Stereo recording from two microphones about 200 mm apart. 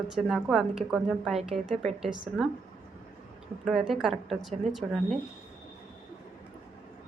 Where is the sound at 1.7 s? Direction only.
35° right (ahead or behind).